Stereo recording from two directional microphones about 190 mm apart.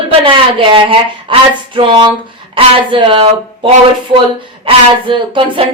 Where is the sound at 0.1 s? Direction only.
30° right (ahead or behind).